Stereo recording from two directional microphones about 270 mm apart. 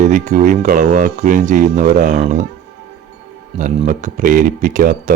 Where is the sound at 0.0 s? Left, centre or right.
Right.